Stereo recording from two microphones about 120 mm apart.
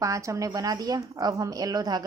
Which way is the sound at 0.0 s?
25° right (ahead or behind).